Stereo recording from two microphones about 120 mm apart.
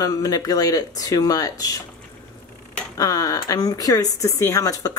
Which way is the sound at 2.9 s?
30° left (ahead or behind).